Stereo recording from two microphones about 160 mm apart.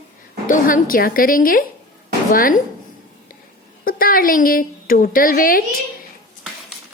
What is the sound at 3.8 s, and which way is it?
A woman's voice, 65° left (ahead or behind).